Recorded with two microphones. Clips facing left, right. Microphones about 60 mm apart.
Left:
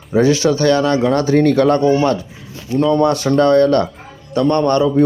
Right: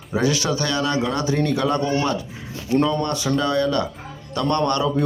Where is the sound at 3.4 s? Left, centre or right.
Left.